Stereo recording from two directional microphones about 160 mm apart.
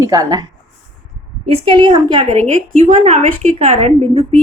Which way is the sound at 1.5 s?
35° right (ahead or behind).